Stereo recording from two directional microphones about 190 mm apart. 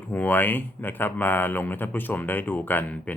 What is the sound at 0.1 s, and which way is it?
A man's voice, 10° left (ahead or behind).